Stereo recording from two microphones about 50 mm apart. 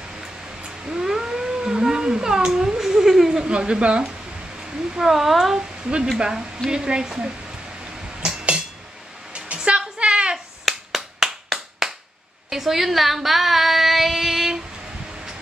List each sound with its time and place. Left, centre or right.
0.7 s cat: centre
4.9 s speech: centre
5.6 s a woman's voice: right
8.2 s a sound: centre
9.7 s a sound: right
10.3 s clapping: centre
12.4 s female singing: centre